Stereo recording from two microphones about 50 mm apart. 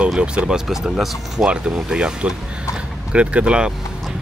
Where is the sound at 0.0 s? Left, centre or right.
Right.